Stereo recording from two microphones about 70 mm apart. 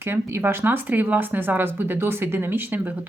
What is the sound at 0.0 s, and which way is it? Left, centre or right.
Speech, right.